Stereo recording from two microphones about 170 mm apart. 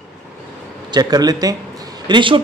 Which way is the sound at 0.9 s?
25° right (ahead or behind).